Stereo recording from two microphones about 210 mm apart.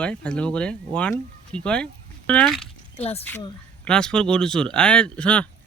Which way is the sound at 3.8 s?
5° left (ahead or behind).